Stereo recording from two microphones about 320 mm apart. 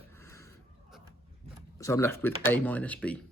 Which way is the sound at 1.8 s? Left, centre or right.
Centre.